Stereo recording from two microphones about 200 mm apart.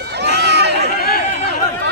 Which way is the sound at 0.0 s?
55° right (ahead or behind).